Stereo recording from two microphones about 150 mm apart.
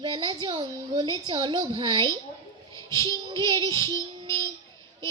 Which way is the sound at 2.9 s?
30° right (ahead or behind).